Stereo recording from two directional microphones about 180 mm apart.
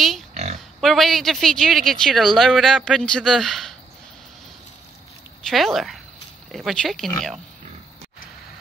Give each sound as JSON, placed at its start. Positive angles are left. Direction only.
{"t": 0.3, "sound": "pig", "side_deg": -40}
{"t": 0.7, "sound": "speech", "side_deg": 0}
{"t": 5.4, "sound": "speech", "side_deg": 0}